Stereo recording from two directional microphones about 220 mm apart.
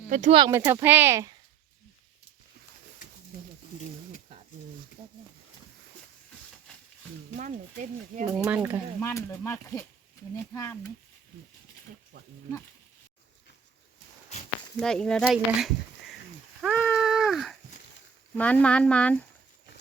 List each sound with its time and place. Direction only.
0.1 s speech: 35° right (ahead or behind)
0.3 s speech: 15° right (ahead or behind)
7.3 s speech: 35° right (ahead or behind)
8.4 s speech: 10° right (ahead or behind)
9.0 s speech: 10° left (ahead or behind)
14.8 s speech: centre (ahead or behind)
16.6 s a sound: centre (ahead or behind)
18.3 s speech: 5° left (ahead or behind)